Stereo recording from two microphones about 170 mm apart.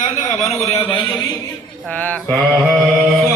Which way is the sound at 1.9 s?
10° left (ahead or behind).